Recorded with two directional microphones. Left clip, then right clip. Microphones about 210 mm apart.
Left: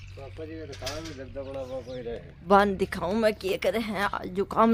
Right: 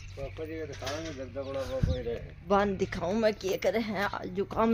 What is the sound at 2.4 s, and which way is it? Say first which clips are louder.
Speech: left 6 dB; 25° left (ahead or behind).